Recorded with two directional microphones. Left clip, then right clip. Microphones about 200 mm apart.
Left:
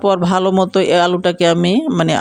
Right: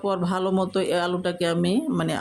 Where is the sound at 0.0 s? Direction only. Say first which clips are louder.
Left 11 dB; 40° left (ahead or behind).